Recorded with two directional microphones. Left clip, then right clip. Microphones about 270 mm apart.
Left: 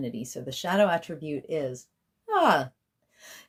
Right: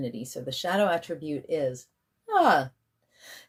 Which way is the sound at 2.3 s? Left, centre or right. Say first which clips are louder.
Right 1 dB; left.